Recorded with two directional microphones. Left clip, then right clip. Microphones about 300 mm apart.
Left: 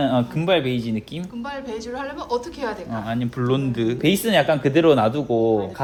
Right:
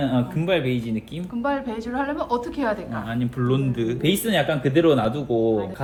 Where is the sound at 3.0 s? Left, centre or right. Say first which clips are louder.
Left 2 dB; left.